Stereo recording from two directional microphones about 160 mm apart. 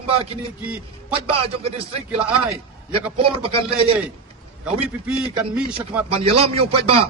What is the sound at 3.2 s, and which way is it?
Speech, 35° right (ahead or behind).